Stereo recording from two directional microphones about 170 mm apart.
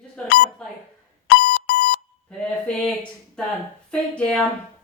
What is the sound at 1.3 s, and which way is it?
Alarm clock, 65° left (ahead or behind).